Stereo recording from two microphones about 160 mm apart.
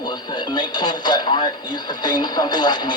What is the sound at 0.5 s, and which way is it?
Radio, 25° left (ahead or behind).